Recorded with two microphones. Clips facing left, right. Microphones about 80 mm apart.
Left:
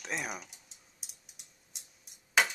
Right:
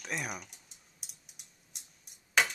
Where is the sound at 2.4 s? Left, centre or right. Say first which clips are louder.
Left 1 dB; centre.